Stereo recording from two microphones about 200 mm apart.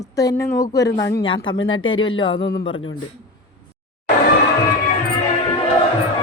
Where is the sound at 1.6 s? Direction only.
80° left.